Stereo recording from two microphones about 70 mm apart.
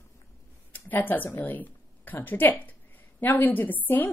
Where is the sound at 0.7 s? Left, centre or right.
Left.